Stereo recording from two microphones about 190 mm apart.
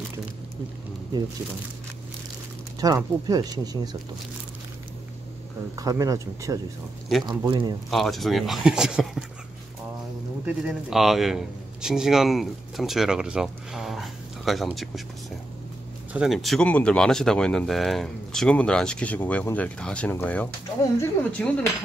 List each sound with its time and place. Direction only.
3.0 s speech: 20° right (ahead or behind)
5.8 s speech: 20° right (ahead or behind)
7.9 s speech: centre (ahead or behind)
10.4 s a man's voice: 5° right (ahead or behind)
16.1 s speech: centre (ahead or behind)